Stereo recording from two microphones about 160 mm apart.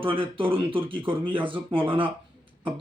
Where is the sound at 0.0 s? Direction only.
35° right (ahead or behind).